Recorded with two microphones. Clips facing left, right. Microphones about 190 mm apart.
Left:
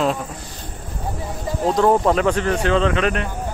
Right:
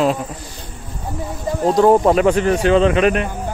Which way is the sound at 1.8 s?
15° right (ahead or behind).